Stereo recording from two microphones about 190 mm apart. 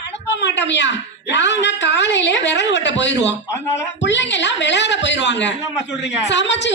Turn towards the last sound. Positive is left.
turn(degrees=70)  # may be behind; listen again after turning